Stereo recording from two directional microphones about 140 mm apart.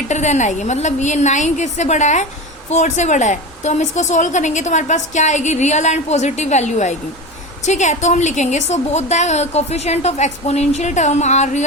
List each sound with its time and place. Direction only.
0.1 s a woman's voice: 55° left (ahead or behind)